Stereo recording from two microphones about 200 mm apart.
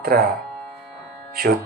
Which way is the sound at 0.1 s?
50° right (ahead or behind).